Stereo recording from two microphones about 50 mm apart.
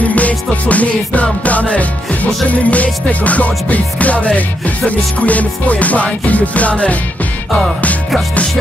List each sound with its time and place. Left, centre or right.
0.0 s music: left